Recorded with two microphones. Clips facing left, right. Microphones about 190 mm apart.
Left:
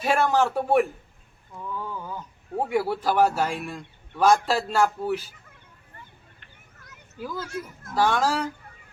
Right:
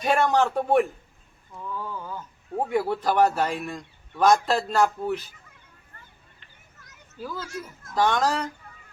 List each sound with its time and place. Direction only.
0.0 s a man's voice: 5° left (ahead or behind)
1.7 s a sound: 15° left (ahead or behind)
2.6 s a man's voice: 5° left (ahead or behind)
7.2 s a man's voice: 15° left (ahead or behind)